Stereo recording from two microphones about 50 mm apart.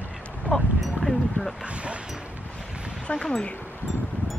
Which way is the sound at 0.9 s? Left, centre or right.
Centre.